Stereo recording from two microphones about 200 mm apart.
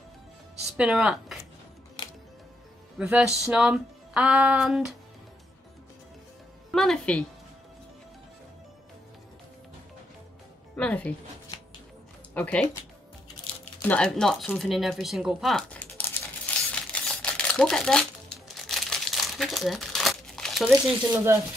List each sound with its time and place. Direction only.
0.7 s speech: 5° right (ahead or behind)
2.0 s music: 25° left (ahead or behind)
3.0 s speech: 5° right (ahead or behind)
6.7 s a woman's voice: centre (ahead or behind)
10.8 s speech: 5° left (ahead or behind)
12.4 s speech: 5° left (ahead or behind)
13.8 s a sound: 5° left (ahead or behind)